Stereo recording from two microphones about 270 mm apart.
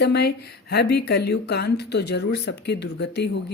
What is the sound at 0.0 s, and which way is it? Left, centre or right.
Speech, left.